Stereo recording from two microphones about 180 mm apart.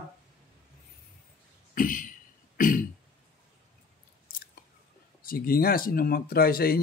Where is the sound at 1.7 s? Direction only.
50° left (ahead or behind).